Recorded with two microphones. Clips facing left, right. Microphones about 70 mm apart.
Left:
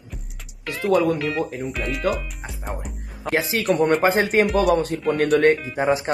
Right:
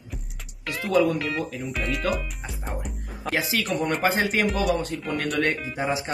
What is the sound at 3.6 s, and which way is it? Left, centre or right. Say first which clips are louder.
Speech: left 10 dB; left.